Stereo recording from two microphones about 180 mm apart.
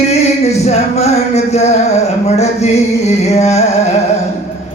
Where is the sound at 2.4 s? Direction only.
40° left (ahead or behind).